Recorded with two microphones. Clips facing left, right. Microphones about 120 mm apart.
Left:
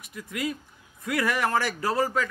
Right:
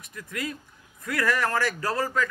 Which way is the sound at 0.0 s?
10° left (ahead or behind).